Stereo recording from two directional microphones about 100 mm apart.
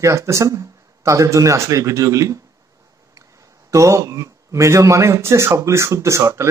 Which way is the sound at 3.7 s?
30° right (ahead or behind).